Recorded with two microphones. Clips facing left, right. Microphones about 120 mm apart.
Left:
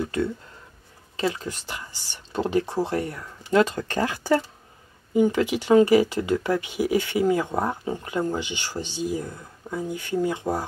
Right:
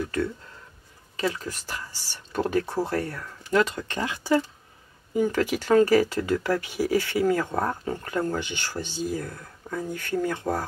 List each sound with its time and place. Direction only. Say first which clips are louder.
0.0 s speech: left 2 dB; 25° left (ahead or behind); by 4.4 s 40° left (ahead or behind)
5.1 s speech: left 3 dB; 20° left (ahead or behind)